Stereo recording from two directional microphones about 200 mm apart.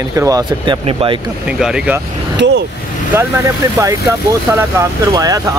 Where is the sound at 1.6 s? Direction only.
5° right (ahead or behind).